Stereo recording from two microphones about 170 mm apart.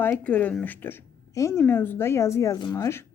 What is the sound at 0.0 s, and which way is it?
A woman's voice, 10° left (ahead or behind).